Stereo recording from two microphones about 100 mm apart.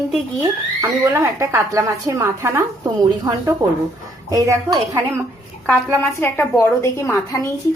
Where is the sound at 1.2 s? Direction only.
25° right (ahead or behind).